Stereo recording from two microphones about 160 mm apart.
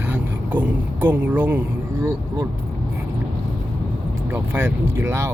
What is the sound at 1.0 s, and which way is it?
Speech, 10° right (ahead or behind).